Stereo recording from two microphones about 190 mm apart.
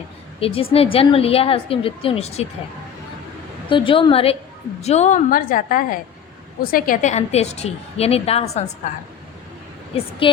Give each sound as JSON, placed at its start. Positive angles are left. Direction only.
{"t": 0.3, "sound": "a woman's voice", "side_deg": 30}
{"t": 3.7, "sound": "a woman's voice", "side_deg": 25}